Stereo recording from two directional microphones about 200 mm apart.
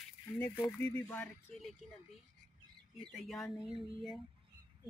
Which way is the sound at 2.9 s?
Centre (ahead or behind).